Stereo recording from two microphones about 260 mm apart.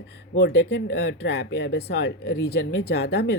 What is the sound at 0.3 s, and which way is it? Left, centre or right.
Speech, left.